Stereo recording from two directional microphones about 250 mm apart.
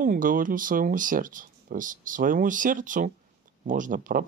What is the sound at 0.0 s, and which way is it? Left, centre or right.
Speech, right.